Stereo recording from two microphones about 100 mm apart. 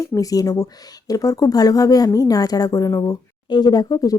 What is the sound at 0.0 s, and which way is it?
A woman's voice, 35° left (ahead or behind).